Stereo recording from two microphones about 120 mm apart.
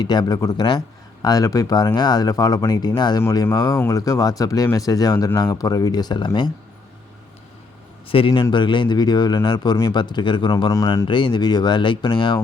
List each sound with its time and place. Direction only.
0.0 s speech: 35° left (ahead or behind)
3.2 s speech: 25° left (ahead or behind)
8.0 s a man's voice: 50° left (ahead or behind); by 11.0 s 30° left (ahead or behind)
11.1 s speech: 40° left (ahead or behind)